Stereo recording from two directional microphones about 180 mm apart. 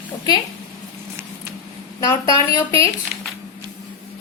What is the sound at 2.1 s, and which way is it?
Speech, 20° left (ahead or behind).